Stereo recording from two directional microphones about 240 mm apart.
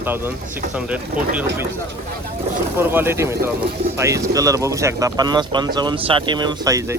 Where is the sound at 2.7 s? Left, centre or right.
Centre.